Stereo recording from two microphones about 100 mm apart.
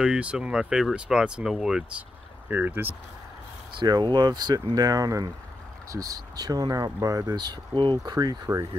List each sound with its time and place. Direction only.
0.0 s speech: 10° right (ahead or behind)
2.4 s speech: 20° right (ahead or behind)
3.8 s speech: 45° right (ahead or behind)
8.0 s speech: 40° right (ahead or behind)